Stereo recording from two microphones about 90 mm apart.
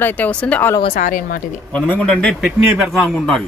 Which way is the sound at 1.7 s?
15° left (ahead or behind).